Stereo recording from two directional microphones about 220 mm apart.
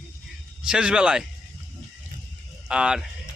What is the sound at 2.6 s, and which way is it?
Speech, 5° right (ahead or behind).